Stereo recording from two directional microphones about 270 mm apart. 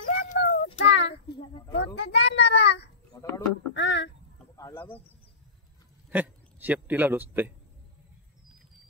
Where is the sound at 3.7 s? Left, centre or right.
Left.